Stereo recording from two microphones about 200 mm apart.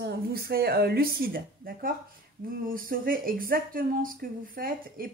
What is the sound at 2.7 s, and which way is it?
Speech, 45° right (ahead or behind).